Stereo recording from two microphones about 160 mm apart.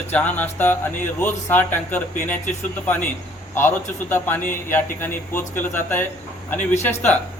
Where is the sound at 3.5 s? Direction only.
15° left (ahead or behind).